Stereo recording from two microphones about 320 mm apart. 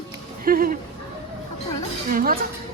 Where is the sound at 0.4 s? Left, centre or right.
Right.